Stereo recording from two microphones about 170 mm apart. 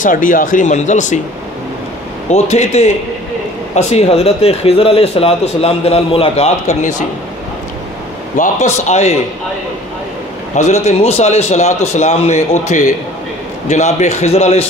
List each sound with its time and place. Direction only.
0.0 s speech: 50° left (ahead or behind)
2.3 s speech: 40° left (ahead or behind)
8.4 s speech: 45° left (ahead or behind)
10.5 s speech: 40° left (ahead or behind)